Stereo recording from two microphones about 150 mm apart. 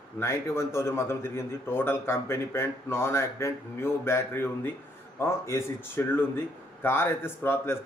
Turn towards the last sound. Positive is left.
turn(degrees=15)  # may be behind; listen again after turning